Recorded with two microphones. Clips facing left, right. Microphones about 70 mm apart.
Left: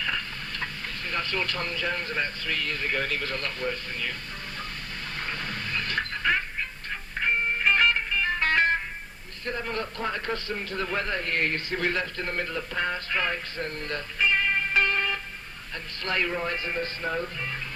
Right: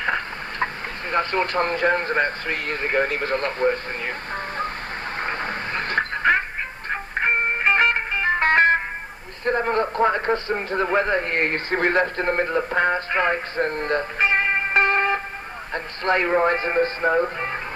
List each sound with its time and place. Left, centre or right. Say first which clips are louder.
1.1 s a man's voice: right 9 dB; right
5.2 s a sound: right 6 dB; right
6.9 s music: right 6 dB; right
9.4 s a man's voice: right 10 dB; right